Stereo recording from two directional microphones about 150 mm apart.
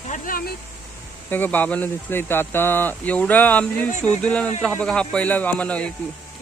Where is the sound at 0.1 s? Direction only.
70° left (ahead or behind).